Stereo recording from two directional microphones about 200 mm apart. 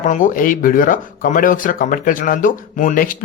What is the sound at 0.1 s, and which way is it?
Speech, 40° left (ahead or behind).